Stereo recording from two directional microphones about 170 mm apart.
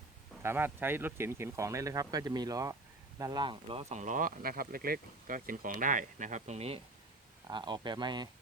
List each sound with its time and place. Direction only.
0.4 s speech: 10° right (ahead or behind); by 6.7 s 40° right (ahead or behind)
7.4 s speech: 25° right (ahead or behind)